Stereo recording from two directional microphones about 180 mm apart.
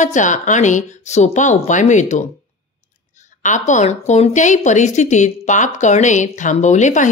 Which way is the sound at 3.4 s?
45° left (ahead or behind).